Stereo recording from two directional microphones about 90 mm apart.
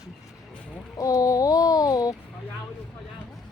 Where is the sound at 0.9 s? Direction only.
40° left (ahead or behind).